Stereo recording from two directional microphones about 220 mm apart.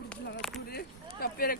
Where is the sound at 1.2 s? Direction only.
40° left (ahead or behind).